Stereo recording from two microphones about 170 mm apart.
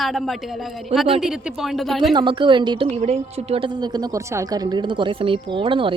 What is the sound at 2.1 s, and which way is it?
Speech, 25° right (ahead or behind).